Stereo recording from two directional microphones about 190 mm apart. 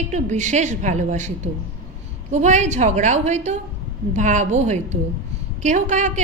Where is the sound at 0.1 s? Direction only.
40° right (ahead or behind).